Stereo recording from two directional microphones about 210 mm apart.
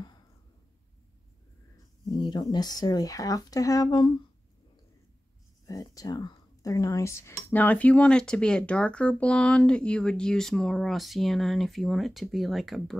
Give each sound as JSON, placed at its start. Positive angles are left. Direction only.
{"t": 2.0, "sound": "speech", "side_deg": 20}
{"t": 5.7, "sound": "speech", "side_deg": 15}